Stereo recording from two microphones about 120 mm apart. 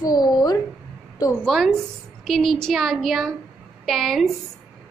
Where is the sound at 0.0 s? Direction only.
30° left (ahead or behind).